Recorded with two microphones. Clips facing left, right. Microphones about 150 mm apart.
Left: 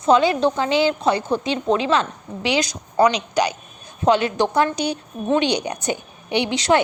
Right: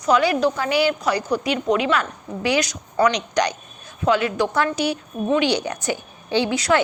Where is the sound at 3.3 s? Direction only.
10° left (ahead or behind).